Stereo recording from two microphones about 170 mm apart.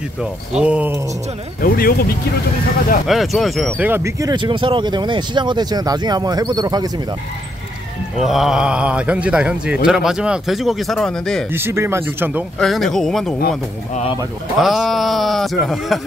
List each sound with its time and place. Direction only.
0.6 s speech: 5° right (ahead or behind)
1.6 s speech: 60° left (ahead or behind)
3.1 s a man's voice: centre (ahead or behind)
3.7 s speech: 10° right (ahead or behind)
8.2 s a man's voice: centre (ahead or behind)
11.5 s speech: 15° right (ahead or behind)
12.5 s a man's voice: centre (ahead or behind)
14.6 s a man's voice: centre (ahead or behind)